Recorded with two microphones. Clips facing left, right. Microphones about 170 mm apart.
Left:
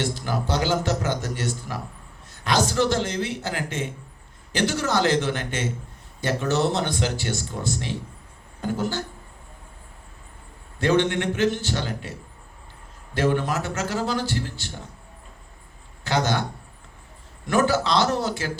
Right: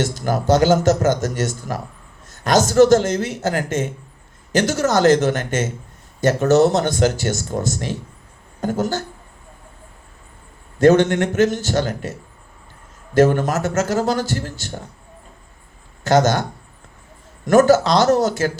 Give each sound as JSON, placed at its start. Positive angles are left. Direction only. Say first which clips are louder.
{"t": 0.0, "sound": "speech", "louder": "right 6 dB", "side_deg": -45}
{"t": 10.8, "sound": "speech", "louder": "right 8 dB", "side_deg": -45}
{"t": 13.1, "sound": "speech", "louder": "right 7 dB", "side_deg": -45}
{"t": 16.0, "sound": "speech", "louder": "right 8 dB", "side_deg": -45}
{"t": 17.4, "sound": "speech", "louder": "right 9 dB", "side_deg": -45}